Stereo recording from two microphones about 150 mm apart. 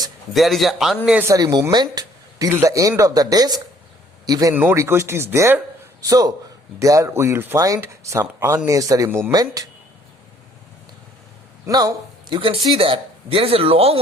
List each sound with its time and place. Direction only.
0.3 s speech: centre (ahead or behind)
1.3 s speech: 25° right (ahead or behind)
9.3 s speech: 25° right (ahead or behind)
11.6 s a sound: 25° right (ahead or behind)
12.4 s speech: 35° right (ahead or behind)